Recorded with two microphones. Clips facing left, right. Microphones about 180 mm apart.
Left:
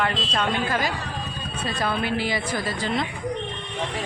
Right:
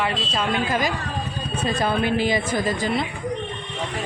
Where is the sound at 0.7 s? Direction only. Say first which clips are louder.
Right 2 dB; 20° right (ahead or behind).